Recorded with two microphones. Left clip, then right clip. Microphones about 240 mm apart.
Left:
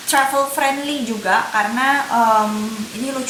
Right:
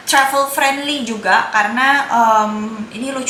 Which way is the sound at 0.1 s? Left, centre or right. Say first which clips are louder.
Right 3 dB; centre.